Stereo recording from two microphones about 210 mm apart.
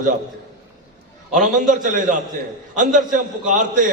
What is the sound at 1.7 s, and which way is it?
A man's voice, 35° right (ahead or behind).